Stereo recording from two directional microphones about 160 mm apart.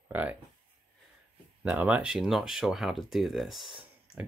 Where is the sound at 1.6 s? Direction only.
10° right (ahead or behind).